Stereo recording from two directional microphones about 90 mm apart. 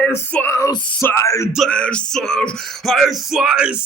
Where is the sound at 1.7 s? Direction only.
10° left (ahead or behind).